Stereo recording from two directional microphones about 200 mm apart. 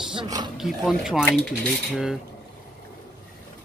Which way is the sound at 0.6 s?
Centre (ahead or behind).